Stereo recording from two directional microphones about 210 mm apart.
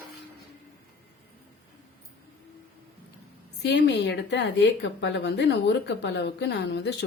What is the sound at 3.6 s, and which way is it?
A woman's voice, 55° left (ahead or behind).